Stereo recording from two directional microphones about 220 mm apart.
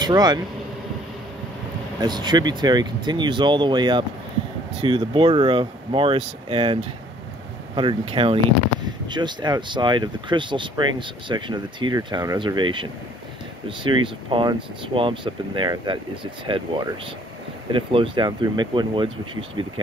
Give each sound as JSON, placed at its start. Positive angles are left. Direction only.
{"t": 0.0, "sound": "speech", "side_deg": -20}
{"t": 2.0, "sound": "speech", "side_deg": -20}